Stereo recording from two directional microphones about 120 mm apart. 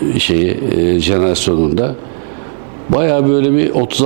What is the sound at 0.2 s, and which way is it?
A man's voice, 15° right (ahead or behind).